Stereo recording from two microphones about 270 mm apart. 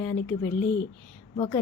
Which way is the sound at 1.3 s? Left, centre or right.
Centre.